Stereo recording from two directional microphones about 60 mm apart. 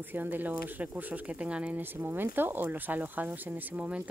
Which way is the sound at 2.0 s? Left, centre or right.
Right.